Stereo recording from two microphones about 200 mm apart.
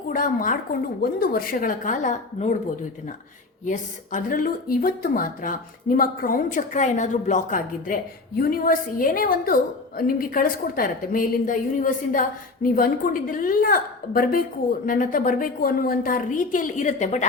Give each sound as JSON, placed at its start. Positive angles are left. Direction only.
{"t": 0.1, "sound": "speech", "side_deg": 40}
{"t": 3.7, "sound": "speech", "side_deg": 40}
{"t": 13.3, "sound": "speech", "side_deg": 45}